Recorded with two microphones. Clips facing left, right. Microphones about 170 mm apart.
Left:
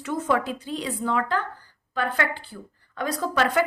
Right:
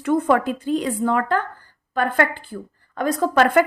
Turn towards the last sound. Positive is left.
turn(degrees=-55)  # may be behind; listen again after turning